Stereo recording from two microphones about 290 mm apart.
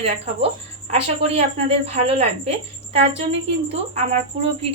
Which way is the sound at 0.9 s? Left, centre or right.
Right.